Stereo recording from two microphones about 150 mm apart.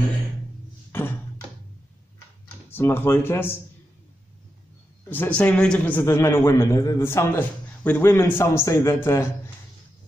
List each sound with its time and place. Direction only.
2.4 s speech: 15° left (ahead or behind)
5.1 s a man's voice: 10° left (ahead or behind)